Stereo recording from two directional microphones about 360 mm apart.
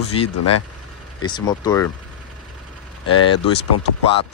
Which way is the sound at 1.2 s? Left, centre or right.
Centre.